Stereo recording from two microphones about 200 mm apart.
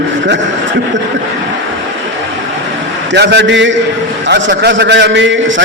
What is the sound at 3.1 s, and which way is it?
A man's voice, 55° right (ahead or behind).